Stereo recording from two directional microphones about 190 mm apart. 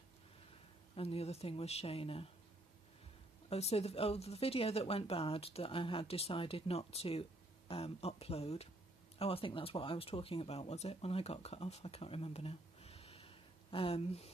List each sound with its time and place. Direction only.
0.9 s a woman's voice: 30° left (ahead or behind)
3.4 s a woman's voice: 30° left (ahead or behind)